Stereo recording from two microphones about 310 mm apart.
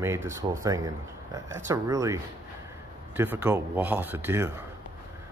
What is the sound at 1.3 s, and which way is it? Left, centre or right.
Speech, centre.